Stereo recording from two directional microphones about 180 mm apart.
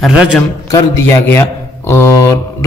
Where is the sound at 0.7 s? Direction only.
15° left (ahead or behind).